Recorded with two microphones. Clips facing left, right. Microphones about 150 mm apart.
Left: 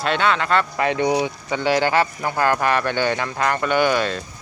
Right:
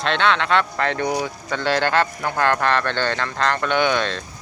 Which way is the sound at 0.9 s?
15° left (ahead or behind).